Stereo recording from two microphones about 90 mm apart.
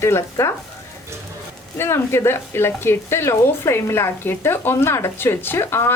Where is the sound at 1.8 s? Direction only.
30° left (ahead or behind).